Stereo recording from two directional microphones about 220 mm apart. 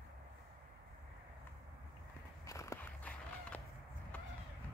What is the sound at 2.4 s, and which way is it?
Walk, 15° left (ahead or behind).